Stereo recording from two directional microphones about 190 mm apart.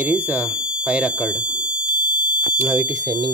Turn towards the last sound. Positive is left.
turn(degrees=-20)  # may be behind; listen again after turning